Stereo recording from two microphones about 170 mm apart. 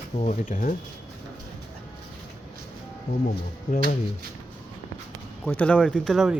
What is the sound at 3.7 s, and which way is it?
Speech, 55° left (ahead or behind).